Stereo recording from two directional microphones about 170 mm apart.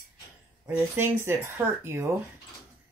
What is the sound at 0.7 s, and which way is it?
Speech, 15° right (ahead or behind).